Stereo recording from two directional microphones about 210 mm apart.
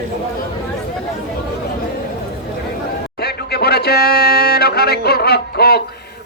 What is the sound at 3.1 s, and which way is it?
Speech, 50° left (ahead or behind).